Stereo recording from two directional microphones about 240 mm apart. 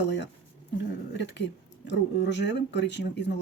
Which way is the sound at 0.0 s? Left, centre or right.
Left.